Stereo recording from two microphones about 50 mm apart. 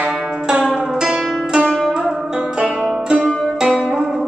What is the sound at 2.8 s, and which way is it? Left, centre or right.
Music, centre.